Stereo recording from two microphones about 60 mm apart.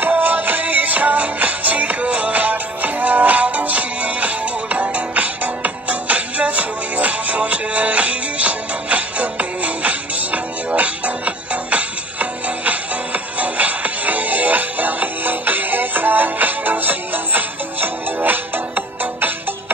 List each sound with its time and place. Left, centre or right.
0.0 s music: right